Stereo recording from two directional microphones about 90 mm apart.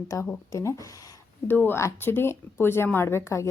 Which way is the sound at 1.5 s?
25° left (ahead or behind).